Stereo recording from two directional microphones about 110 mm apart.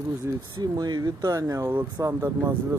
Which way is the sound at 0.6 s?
40° right (ahead or behind).